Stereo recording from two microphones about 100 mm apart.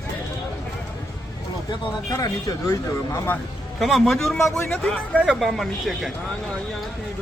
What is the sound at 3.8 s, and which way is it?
Speech, centre (ahead or behind).